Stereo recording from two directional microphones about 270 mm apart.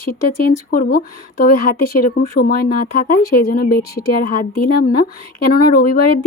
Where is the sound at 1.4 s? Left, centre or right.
Left.